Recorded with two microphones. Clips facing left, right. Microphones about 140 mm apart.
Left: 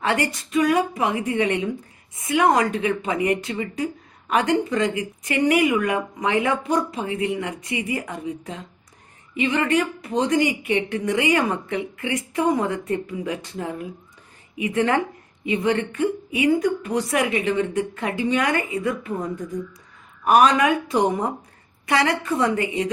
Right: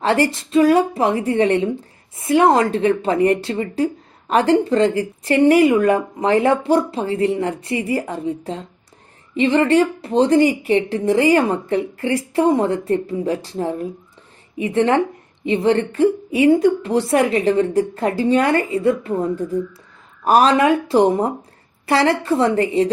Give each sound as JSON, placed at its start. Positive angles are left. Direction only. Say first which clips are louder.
{"t": 0.0, "sound": "a woman's voice", "louder": "right 6 dB", "side_deg": -30}